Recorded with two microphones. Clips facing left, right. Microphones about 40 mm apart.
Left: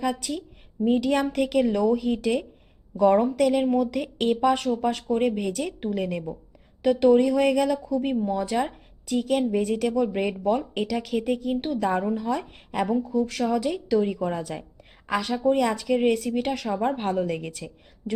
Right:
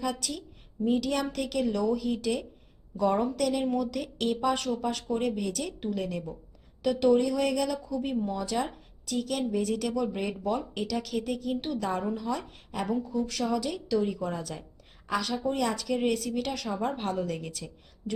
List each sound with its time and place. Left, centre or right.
0.0 s a woman's voice: left
8.1 s a woman's voice: centre